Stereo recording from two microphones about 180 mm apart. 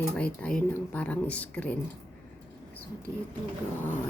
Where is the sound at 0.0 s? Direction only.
10° left (ahead or behind).